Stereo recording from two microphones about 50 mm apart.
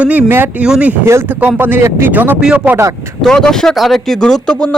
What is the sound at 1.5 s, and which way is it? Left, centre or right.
Speech, right.